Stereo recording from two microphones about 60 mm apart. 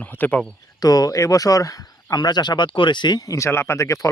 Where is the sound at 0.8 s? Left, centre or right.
Left.